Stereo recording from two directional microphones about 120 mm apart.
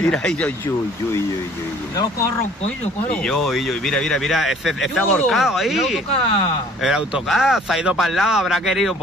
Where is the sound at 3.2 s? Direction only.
5° left (ahead or behind).